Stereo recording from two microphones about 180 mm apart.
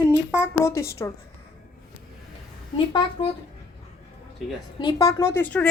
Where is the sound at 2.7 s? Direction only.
30° left (ahead or behind).